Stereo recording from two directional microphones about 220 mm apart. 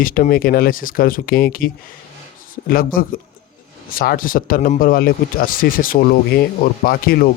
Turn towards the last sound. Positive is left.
turn(degrees=40)  # may be behind; listen again after turning